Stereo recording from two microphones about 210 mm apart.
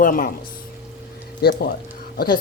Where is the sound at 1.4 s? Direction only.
50° left (ahead or behind).